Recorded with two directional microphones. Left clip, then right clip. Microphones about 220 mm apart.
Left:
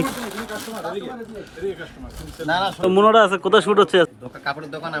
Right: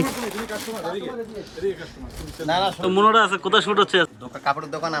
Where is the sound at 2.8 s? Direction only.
5° right (ahead or behind).